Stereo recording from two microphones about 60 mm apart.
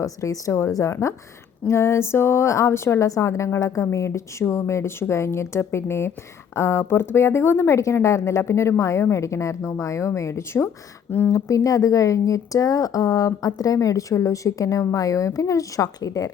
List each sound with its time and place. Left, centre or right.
0.0 s speech: left
1.6 s a woman's voice: left
11.3 s speech: left